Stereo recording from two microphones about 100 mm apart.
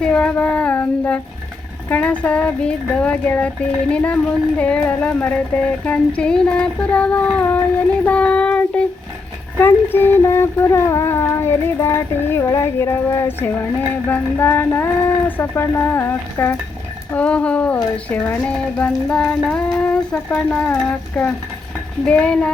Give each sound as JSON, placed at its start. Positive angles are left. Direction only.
{"t": 0.0, "sound": "child singing", "side_deg": 10}
{"t": 1.9, "sound": "speech", "side_deg": 15}
{"t": 9.6, "sound": "a sound", "side_deg": 20}
{"t": 17.2, "sound": "speech", "side_deg": 10}